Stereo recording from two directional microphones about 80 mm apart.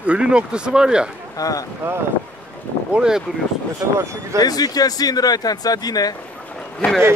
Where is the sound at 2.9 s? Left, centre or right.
Centre.